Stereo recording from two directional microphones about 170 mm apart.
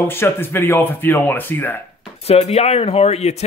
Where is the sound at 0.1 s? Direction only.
15° left (ahead or behind).